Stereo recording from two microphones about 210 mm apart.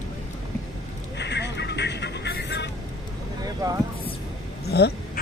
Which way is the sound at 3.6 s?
15° right (ahead or behind).